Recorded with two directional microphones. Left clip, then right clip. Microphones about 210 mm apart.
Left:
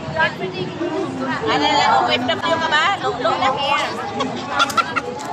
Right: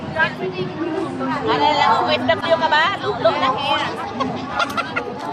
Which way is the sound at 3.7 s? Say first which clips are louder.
Left 1 dB; 55° left (ahead or behind).